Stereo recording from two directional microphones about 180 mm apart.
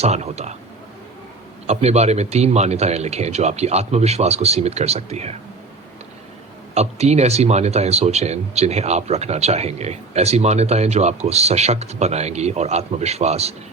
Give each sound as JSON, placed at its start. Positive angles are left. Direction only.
{"t": 0.0, "sound": "speech", "side_deg": -35}
{"t": 1.6, "sound": "speech", "side_deg": -35}
{"t": 6.7, "sound": "speech", "side_deg": -35}